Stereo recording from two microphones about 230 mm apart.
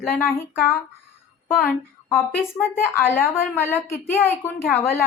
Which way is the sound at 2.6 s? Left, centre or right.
Centre.